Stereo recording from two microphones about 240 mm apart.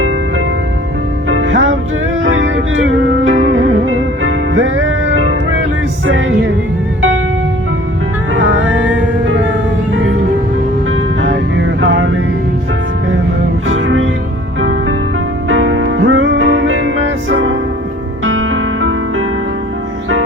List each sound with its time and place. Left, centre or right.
1.3 s music: right
8.3 s music: right
8.6 s music: centre
11.2 s music: right
13.7 s music: right